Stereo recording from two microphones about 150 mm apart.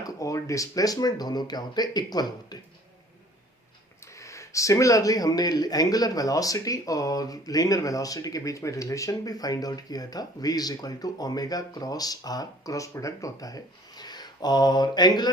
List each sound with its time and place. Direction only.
0.0 s speech: 20° left (ahead or behind)
4.0 s speech: 20° left (ahead or behind)